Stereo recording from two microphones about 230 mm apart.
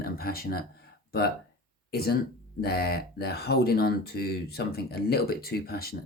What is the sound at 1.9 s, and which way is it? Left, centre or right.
Speech, left.